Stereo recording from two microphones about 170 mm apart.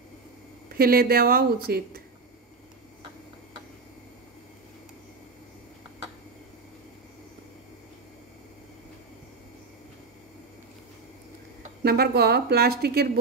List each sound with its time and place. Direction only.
0.7 s a woman's voice: 65° right (ahead or behind)
11.8 s a woman's voice: 65° right (ahead or behind)